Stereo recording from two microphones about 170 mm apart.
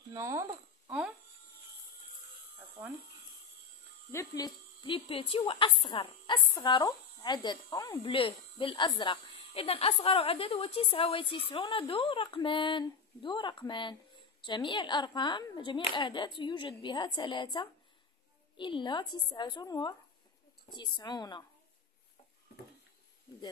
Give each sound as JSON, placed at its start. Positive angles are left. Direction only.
{"t": 0.1, "sound": "speech", "side_deg": -20}
{"t": 0.8, "sound": "a sound", "side_deg": -5}
{"t": 4.1, "sound": "speech", "side_deg": 15}
{"t": 4.8, "sound": "speech", "side_deg": 30}
{"t": 8.1, "sound": "speech", "side_deg": 30}